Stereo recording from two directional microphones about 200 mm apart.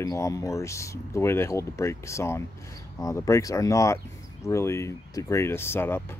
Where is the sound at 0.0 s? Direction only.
15° left (ahead or behind).